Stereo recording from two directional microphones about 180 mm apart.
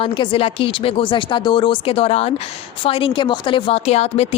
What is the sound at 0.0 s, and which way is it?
A woman's voice, 30° left (ahead or behind).